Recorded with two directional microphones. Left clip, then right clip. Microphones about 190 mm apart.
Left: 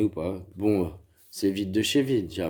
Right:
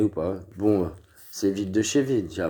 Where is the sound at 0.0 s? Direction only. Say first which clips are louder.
Right 3 dB; 5° left (ahead or behind).